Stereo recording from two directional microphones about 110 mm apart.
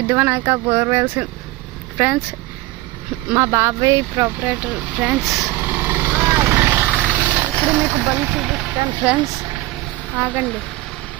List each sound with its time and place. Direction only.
0.1 s speech: 20° right (ahead or behind)
3.3 s speech: 25° right (ahead or behind)
5.2 s speech: centre (ahead or behind)
5.5 s vehicle: 15° right (ahead or behind)
7.7 s speech: 15° right (ahead or behind)
8.4 s speech: 5° right (ahead or behind)
10.2 s speech: 15° right (ahead or behind)